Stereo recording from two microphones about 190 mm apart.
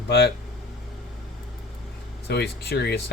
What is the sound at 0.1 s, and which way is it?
Speech, 55° left (ahead or behind).